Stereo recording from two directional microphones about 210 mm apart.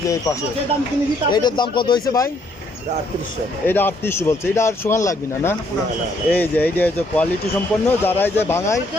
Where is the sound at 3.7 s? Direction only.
10° left (ahead or behind).